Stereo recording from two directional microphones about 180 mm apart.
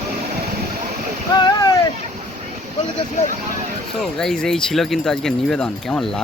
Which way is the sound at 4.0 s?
Centre (ahead or behind).